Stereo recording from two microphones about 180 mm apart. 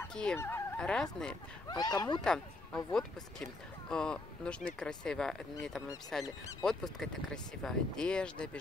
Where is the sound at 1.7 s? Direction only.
20° left (ahead or behind).